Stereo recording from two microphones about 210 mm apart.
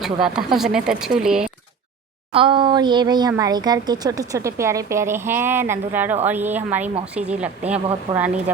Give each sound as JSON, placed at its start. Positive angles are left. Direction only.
{"t": 0.0, "sound": "speech", "side_deg": 0}
{"t": 2.3, "sound": "speech", "side_deg": -25}